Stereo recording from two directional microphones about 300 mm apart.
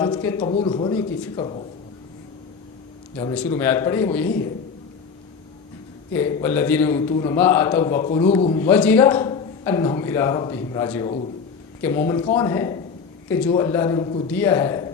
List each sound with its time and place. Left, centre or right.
0.0 s a man's voice: centre
3.2 s a man's voice: centre
6.1 s a man's voice: centre